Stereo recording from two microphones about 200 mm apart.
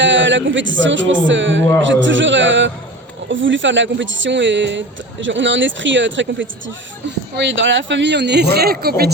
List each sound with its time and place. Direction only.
0.0 s speech: 65° right (ahead or behind); by 9.1 s 50° right (ahead or behind)